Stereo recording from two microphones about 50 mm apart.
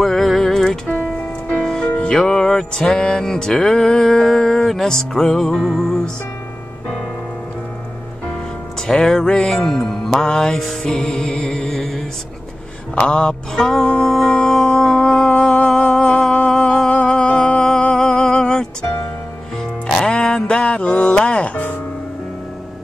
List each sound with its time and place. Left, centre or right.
0.0 s music: centre
9.1 s music: centre
10.6 s music: centre
10.9 s music: centre
12.9 s music: centre
13.6 s music: centre
15.0 s a sound: centre
15.2 s a sound: left
16.4 s humming: centre
20.1 s music: left